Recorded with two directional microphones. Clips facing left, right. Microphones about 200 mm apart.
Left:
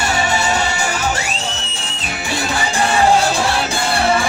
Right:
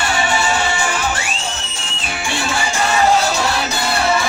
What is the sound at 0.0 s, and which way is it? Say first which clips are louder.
Music: even; 40° left (ahead or behind).